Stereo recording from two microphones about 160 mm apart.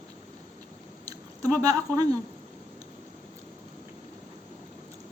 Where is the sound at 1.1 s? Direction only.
20° right (ahead or behind).